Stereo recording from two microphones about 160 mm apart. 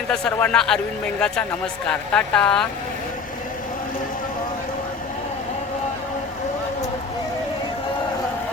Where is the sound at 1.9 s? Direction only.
5° left (ahead or behind).